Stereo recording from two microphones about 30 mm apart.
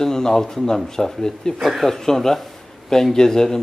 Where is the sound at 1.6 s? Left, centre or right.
Centre.